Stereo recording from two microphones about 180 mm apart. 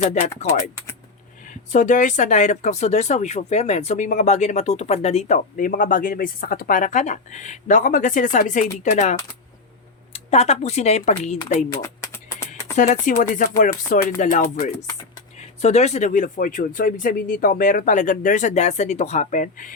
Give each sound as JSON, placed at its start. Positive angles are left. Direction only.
{"t": 0.0, "sound": "speech", "side_deg": 40}
{"t": 0.4, "sound": "speech", "side_deg": 15}
{"t": 1.5, "sound": "speech", "side_deg": 45}
{"t": 11.7, "sound": "typing", "side_deg": 15}
{"t": 12.7, "sound": "speech", "side_deg": 45}